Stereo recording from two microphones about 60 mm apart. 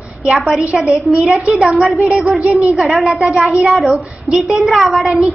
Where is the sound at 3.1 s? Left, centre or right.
Centre.